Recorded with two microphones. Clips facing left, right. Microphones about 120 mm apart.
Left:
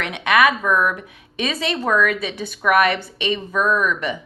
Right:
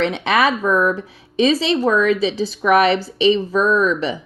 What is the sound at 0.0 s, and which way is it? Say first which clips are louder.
A woman's voice: right 1 dB; 30° right (ahead or behind).